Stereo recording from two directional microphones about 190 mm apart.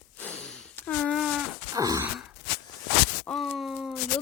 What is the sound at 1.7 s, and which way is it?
Wail, 20° right (ahead or behind).